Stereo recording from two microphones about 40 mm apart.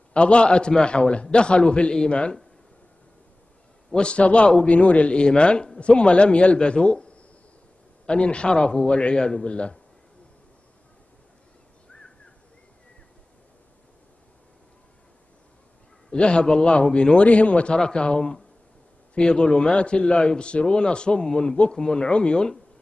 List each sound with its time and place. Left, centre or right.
0.1 s a man's voice: left
3.9 s a man's voice: left
16.1 s a man's voice: left
17.7 s a man's voice: left